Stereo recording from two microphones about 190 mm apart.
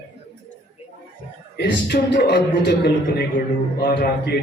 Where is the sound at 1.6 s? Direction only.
65° left (ahead or behind).